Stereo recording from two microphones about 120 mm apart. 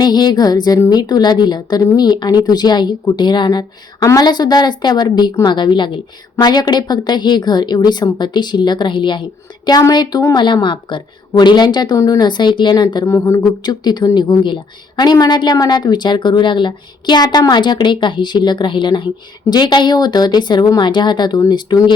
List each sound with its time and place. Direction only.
0.0 s speech: 35° left (ahead or behind)
13.1 s speech: 25° left (ahead or behind)